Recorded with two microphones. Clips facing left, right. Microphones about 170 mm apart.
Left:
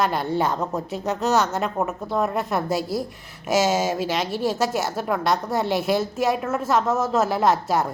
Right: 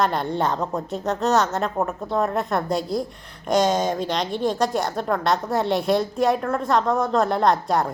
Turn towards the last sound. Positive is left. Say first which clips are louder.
# even
turn(degrees=0)  # may be behind; listen again after turning